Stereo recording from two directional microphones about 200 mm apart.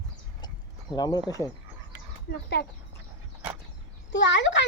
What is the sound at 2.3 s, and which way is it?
Speech, 55° left (ahead or behind).